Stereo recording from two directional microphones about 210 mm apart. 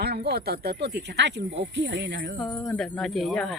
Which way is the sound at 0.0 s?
50° right (ahead or behind).